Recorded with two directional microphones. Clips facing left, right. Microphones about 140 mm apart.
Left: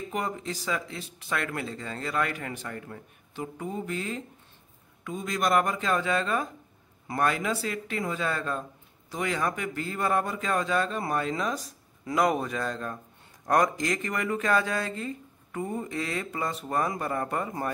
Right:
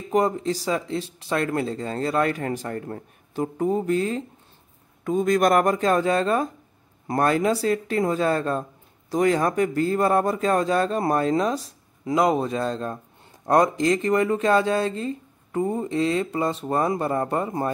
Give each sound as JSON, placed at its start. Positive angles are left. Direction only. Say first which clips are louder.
{"t": 0.1, "sound": "speech", "louder": "right 13 dB", "side_deg": -35}
{"t": 12.0, "sound": "speech", "louder": "right 5 dB", "side_deg": -20}